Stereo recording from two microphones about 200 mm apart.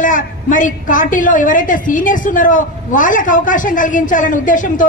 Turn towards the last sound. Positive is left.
turn(degrees=40)  # may be behind; listen again after turning